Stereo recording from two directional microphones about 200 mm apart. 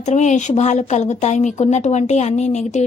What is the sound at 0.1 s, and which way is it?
Speech, 35° left (ahead or behind).